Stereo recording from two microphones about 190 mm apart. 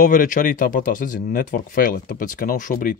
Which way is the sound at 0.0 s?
45° left (ahead or behind).